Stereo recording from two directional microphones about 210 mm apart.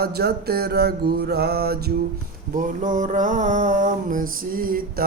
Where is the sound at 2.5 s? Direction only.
40° right (ahead or behind).